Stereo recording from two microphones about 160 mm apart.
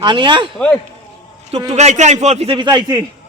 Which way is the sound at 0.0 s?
30° right (ahead or behind).